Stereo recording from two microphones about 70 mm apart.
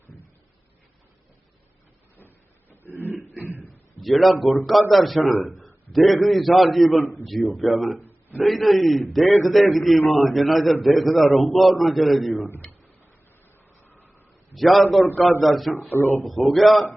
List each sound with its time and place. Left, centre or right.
2.1 s printer: left
2.8 s a sound: right
3.3 s throat clearing: right
4.0 s a man's voice: centre
14.5 s a man's voice: centre